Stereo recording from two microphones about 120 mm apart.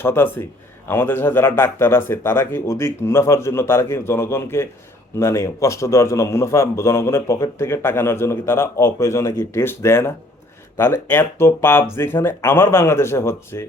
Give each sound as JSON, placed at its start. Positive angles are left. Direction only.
{"t": 0.0, "sound": "a man's voice", "side_deg": 20}